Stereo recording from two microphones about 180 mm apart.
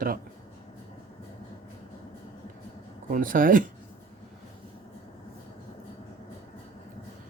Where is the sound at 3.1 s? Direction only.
50° right (ahead or behind).